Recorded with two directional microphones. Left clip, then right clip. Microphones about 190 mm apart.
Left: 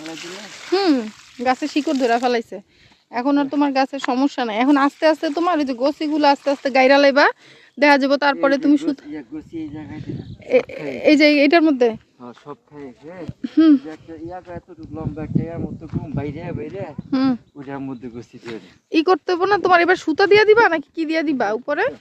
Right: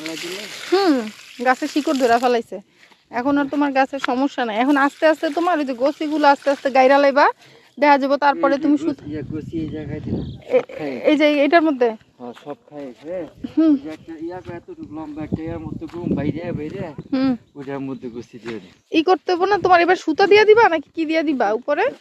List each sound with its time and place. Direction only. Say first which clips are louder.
0.0 s speech: right 4 dB; 20° right (ahead or behind)
0.7 s speech: right 1 dB; 15° left (ahead or behind); by 9.2 s 30° left (ahead or behind)
10.5 s speech: left 1 dB; 45° left (ahead or behind)
13.4 s speech: left 3 dB; 45° left (ahead or behind)
14.3 s speech: right 1 dB; 10° left (ahead or behind)
17.1 s speech: left 1 dB; 25° left (ahead or behind)
17.6 s speech: right 2 dB; 10° left (ahead or behind)